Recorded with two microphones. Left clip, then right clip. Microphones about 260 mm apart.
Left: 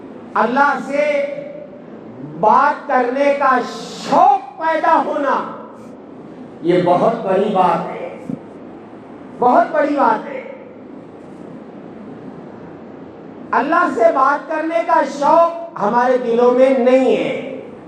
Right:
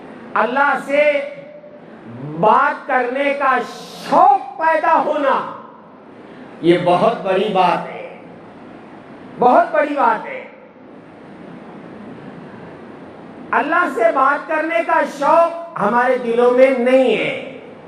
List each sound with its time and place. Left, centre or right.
0.3 s a woman's voice: right
2.4 s a woman's voice: right
6.7 s a woman's voice: right
9.4 s a woman's voice: right
13.5 s a woman's voice: right